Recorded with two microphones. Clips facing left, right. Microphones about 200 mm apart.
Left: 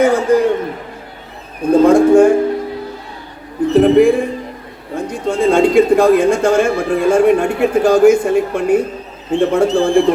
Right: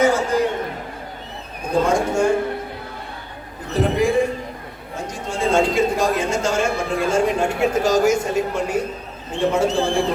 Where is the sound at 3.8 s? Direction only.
60° left (ahead or behind).